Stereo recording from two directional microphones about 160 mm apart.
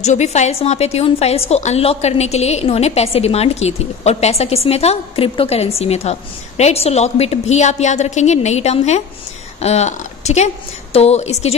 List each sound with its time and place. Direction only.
0.0 s a woman's voice: 45° left (ahead or behind)